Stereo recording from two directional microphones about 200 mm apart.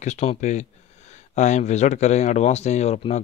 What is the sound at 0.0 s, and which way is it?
Speech, 35° left (ahead or behind).